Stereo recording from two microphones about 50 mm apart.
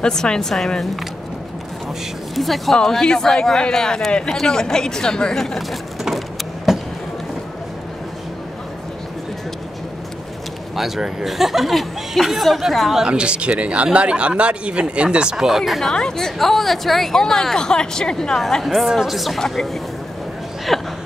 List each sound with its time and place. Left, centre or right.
0.0 s speech: centre
2.3 s speech: centre
2.7 s speech: centre
6.0 s vehicle: centre
10.8 s speech: centre
13.0 s speech: centre
15.9 s speech: centre
18.6 s speech: centre
20.7 s a sound: centre